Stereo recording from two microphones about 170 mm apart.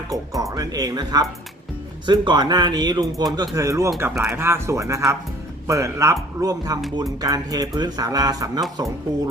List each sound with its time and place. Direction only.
0.1 s speech: 20° right (ahead or behind)